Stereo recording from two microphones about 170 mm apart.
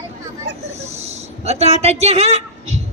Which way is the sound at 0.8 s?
40° right (ahead or behind).